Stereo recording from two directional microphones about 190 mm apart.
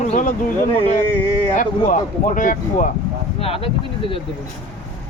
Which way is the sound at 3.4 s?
30° left (ahead or behind).